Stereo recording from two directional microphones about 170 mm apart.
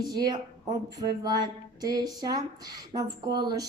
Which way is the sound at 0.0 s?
25° right (ahead or behind).